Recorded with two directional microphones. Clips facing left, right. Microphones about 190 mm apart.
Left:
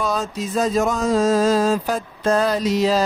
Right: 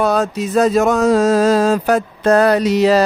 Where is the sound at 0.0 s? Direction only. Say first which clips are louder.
Right 7 dB; 65° right (ahead or behind).